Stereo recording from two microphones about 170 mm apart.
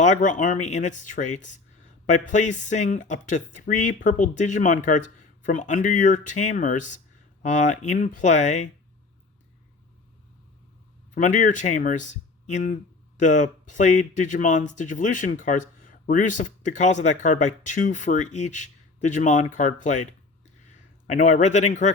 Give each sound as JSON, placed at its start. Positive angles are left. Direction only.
{"t": 0.0, "sound": "speech", "side_deg": 45}
{"t": 11.1, "sound": "speech", "side_deg": 50}